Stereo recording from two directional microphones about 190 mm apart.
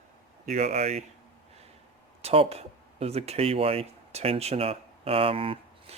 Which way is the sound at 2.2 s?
35° right (ahead or behind).